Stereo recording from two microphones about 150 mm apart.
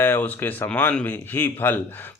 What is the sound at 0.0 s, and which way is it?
Speech, 15° left (ahead or behind).